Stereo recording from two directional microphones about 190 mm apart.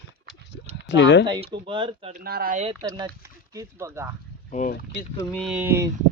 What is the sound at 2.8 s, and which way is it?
Speech, 20° right (ahead or behind).